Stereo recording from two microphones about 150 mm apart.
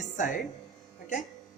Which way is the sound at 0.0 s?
55° left (ahead or behind).